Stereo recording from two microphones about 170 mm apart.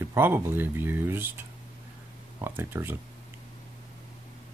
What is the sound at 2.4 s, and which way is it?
Speech, 15° right (ahead or behind).